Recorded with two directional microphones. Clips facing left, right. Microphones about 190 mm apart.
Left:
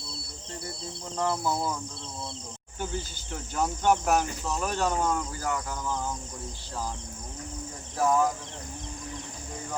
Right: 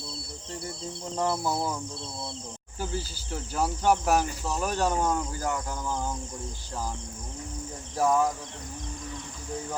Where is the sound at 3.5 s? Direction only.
5° right (ahead or behind).